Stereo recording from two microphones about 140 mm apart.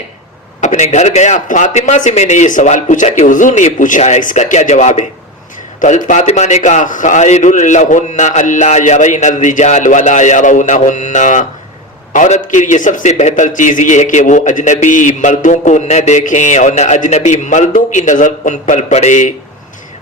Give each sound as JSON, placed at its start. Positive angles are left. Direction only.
{"t": 0.6, "sound": "a man's voice", "side_deg": 55}